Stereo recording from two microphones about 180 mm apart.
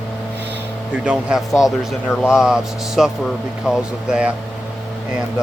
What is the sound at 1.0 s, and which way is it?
Speech, 5° right (ahead or behind).